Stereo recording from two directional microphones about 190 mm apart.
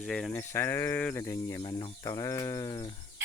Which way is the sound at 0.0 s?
5° left (ahead or behind).